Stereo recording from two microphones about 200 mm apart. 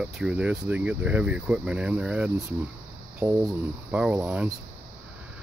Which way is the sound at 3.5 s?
5° right (ahead or behind).